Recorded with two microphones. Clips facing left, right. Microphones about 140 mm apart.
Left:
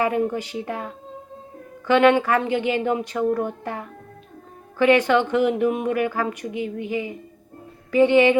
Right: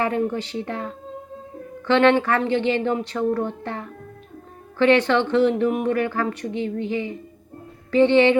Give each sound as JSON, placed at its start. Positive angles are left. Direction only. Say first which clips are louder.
{"t": 0.0, "sound": "speech", "louder": "left 1 dB", "side_deg": 10}